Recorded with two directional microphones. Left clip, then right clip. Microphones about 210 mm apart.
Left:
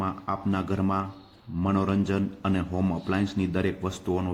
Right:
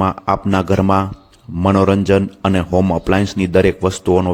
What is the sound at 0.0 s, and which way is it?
A man's voice, 50° right (ahead or behind).